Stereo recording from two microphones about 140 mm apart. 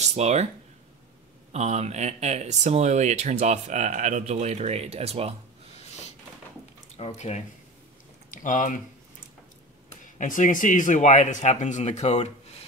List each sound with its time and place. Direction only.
0.1 s speech: 50° right (ahead or behind)
1.5 s speech: 55° right (ahead or behind)
7.0 s speech: 50° left (ahead or behind)
8.3 s speech: 65° left (ahead or behind)
10.1 s speech: 65° left (ahead or behind)